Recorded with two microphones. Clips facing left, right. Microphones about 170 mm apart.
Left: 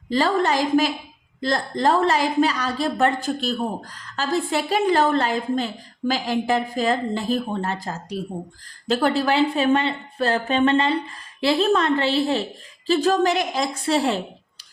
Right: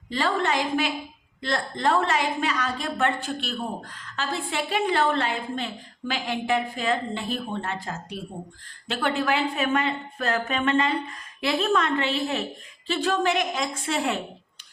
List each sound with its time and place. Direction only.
0.1 s a woman's voice: 40° left (ahead or behind)